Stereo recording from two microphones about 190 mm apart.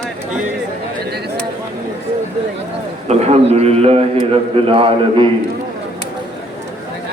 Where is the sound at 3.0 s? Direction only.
35° right (ahead or behind).